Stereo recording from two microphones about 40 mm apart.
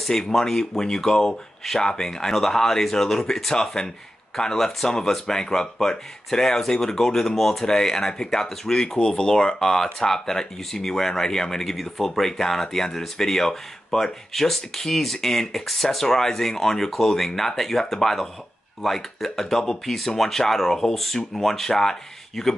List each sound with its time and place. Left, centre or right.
0.3 s speech: centre